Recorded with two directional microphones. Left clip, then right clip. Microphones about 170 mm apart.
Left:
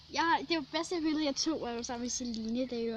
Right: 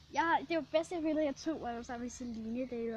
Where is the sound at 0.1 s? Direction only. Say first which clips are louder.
Left 2 dB; centre (ahead or behind).